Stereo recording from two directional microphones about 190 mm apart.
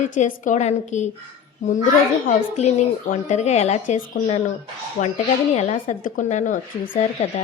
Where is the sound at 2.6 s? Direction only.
35° left (ahead or behind).